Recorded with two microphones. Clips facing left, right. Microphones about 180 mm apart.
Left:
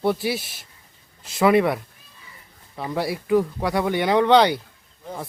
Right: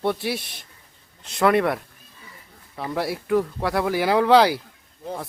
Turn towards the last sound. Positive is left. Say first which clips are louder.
# even
turn(degrees=-5)  # may be behind; listen again after turning